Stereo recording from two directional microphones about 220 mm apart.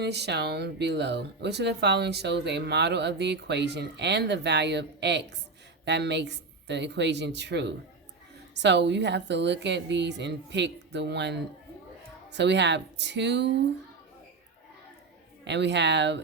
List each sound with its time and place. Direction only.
0.0 s speech: 50° right (ahead or behind)
15.4 s speech: 50° right (ahead or behind)